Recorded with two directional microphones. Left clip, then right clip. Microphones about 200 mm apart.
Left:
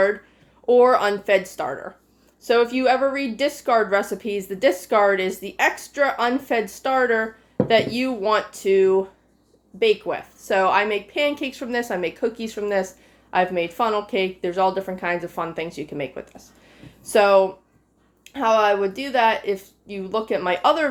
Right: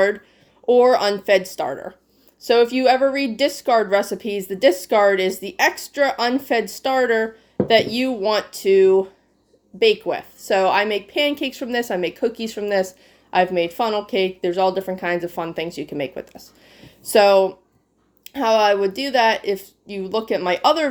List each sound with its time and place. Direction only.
0.7 s a woman's voice: 30° right (ahead or behind)